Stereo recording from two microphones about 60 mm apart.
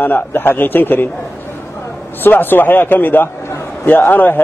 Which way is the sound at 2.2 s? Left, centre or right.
Left.